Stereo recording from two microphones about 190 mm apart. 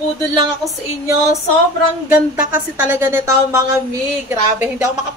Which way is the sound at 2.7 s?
10° right (ahead or behind).